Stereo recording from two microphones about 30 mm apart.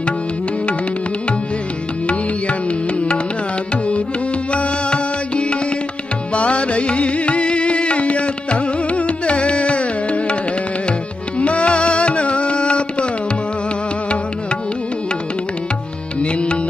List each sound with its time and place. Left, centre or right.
4.5 s music: left
11.3 s music: left
16.2 s music: left